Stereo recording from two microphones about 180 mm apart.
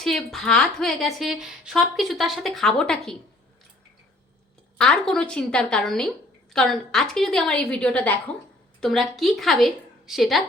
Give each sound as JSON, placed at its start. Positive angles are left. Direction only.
{"t": 0.0, "sound": "a woman's voice", "side_deg": 0}
{"t": 4.8, "sound": "a woman's voice", "side_deg": 5}